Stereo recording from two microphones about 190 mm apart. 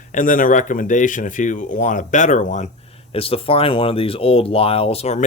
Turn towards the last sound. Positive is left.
turn(degrees=35)  # may be behind; listen again after turning